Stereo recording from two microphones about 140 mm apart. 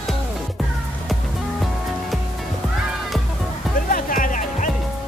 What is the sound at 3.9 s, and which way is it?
Music, 75° left (ahead or behind).